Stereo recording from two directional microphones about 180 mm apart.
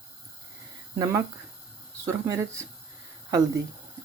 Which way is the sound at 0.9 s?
20° right (ahead or behind).